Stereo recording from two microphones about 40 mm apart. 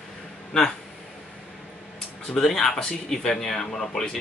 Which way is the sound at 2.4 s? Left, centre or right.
Centre.